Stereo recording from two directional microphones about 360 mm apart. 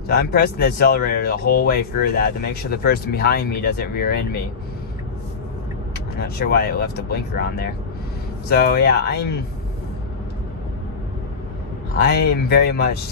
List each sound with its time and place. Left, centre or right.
0.1 s speech: left
6.1 s speech: left
12.0 s speech: left